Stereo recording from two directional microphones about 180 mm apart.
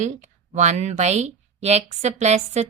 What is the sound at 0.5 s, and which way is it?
A woman's voice, 40° right (ahead or behind).